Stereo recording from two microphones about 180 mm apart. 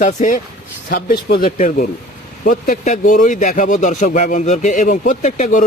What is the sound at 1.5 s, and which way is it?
A man's voice, 40° left (ahead or behind).